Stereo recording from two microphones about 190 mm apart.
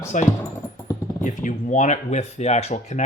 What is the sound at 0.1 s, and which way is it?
Speech, 40° left (ahead or behind).